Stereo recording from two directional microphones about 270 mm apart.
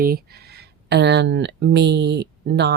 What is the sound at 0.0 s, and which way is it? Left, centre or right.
A woman's voice, right.